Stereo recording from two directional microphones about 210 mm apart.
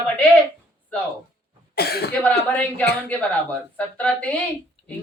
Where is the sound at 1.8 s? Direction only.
50° left (ahead or behind).